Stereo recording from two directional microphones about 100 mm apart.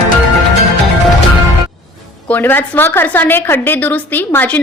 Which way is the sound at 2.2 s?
20° left (ahead or behind).